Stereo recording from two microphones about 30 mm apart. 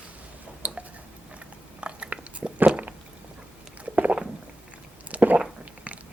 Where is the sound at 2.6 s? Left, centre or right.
Right.